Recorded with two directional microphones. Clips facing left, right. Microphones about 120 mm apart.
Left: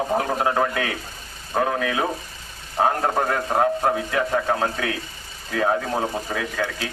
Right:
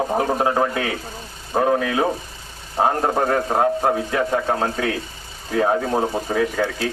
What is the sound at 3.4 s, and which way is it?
Speech, 15° right (ahead or behind).